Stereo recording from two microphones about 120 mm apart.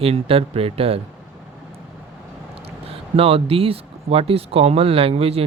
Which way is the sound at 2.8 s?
55° right (ahead or behind).